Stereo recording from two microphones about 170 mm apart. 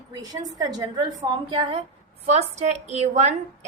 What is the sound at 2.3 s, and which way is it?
A woman's voice, 40° right (ahead or behind).